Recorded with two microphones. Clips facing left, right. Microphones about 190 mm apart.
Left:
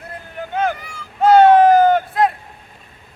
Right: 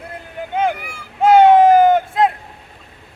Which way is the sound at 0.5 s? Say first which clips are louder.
Right 2 dB; 15° right (ahead or behind).